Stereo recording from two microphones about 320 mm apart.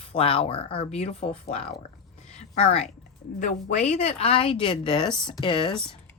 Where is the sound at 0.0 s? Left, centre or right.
Centre.